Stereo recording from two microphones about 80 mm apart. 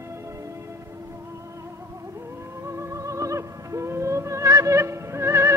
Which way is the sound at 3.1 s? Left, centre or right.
Right.